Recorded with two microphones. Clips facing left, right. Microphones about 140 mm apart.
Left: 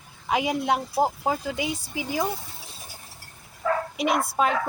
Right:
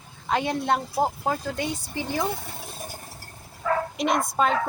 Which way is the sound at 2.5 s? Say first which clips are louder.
Right 7 dB; 55° right (ahead or behind).